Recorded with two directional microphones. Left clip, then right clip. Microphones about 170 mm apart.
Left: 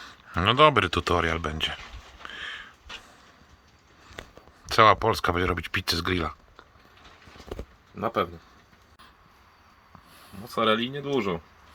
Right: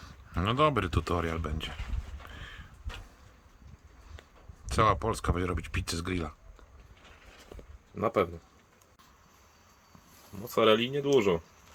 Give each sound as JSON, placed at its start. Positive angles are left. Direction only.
{"t": 0.0, "sound": "speech", "side_deg": -5}
{"t": 2.2, "sound": "a sound", "side_deg": -5}
{"t": 4.7, "sound": "speech", "side_deg": -5}
{"t": 7.9, "sound": "speech", "side_deg": -35}
{"t": 10.4, "sound": "speech", "side_deg": -25}